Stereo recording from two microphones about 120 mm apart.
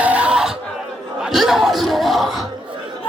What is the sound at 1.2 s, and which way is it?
Battle cry, 5° right (ahead or behind).